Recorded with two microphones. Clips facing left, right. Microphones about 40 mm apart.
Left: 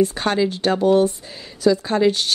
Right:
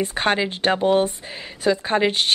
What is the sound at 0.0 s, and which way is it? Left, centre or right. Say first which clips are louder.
A woman's voice: left 2 dB; right.